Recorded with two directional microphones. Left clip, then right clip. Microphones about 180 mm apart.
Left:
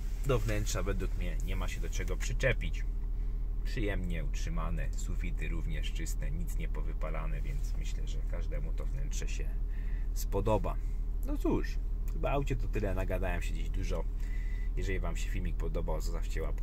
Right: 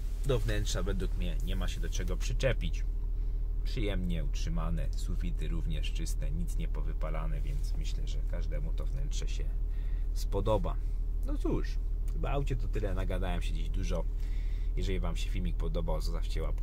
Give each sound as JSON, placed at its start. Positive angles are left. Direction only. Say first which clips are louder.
{"t": 0.3, "sound": "speech", "louder": "even", "side_deg": 10}
{"t": 1.2, "sound": "speech", "louder": "right 1 dB", "side_deg": 0}
{"t": 9.1, "sound": "speech", "louder": "left 2 dB", "side_deg": 10}
{"t": 11.2, "sound": "speech", "louder": "left 2 dB", "side_deg": 20}
{"t": 12.9, "sound": "speech", "louder": "left 2 dB", "side_deg": 5}